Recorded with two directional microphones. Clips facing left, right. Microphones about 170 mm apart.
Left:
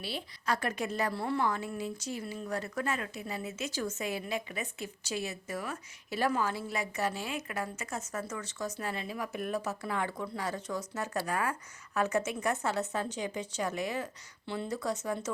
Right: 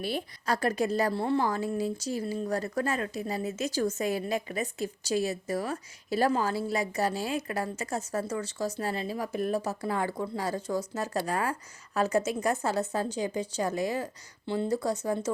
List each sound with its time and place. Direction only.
0.0 s a woman's voice: 50° right (ahead or behind); by 15.3 s 35° right (ahead or behind)